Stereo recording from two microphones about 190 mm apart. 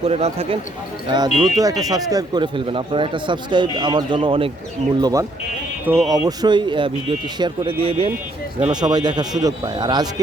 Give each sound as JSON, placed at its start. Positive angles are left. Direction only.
{"t": 0.0, "sound": "speech", "side_deg": -30}
{"t": 1.1, "sound": "speech", "side_deg": -20}